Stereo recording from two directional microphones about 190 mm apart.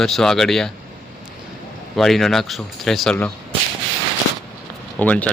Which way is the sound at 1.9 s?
Centre (ahead or behind).